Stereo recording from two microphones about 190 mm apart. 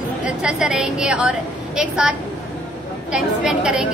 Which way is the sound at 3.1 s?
5° right (ahead or behind).